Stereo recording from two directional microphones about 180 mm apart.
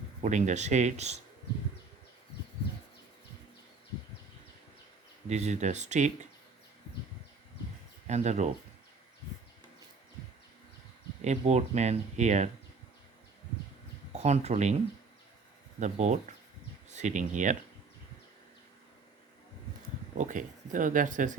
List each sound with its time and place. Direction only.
0.2 s speech: 40° right (ahead or behind)
5.3 s speech: 40° right (ahead or behind)
8.0 s speech: 40° right (ahead or behind)
11.2 s speech: 40° right (ahead or behind)
14.1 s speech: 40° right (ahead or behind)
15.8 s speech: 40° right (ahead or behind)
20.1 s speech: 45° right (ahead or behind)